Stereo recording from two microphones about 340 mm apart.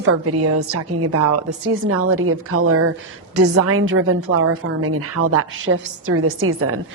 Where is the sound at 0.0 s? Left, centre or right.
Right.